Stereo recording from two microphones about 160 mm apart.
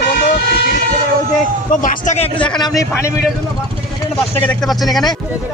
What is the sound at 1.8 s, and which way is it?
Speech, 60° left (ahead or behind).